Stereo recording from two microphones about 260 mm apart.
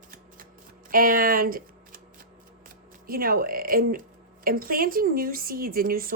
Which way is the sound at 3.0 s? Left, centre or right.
Right.